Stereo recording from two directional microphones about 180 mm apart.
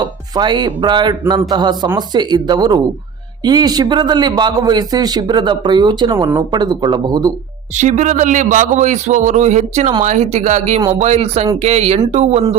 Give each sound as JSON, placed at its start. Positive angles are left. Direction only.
{"t": 0.0, "sound": "a man's voice", "side_deg": -25}
{"t": 7.8, "sound": "a man's voice", "side_deg": -40}